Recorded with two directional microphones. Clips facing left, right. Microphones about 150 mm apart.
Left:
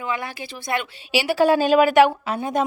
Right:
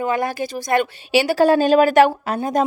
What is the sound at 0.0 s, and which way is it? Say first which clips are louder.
A woman's voice: right 7 dB; 45° right (ahead or behind).